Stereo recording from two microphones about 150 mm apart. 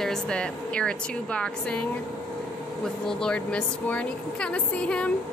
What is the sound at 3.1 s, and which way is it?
A woman's voice, 5° left (ahead or behind).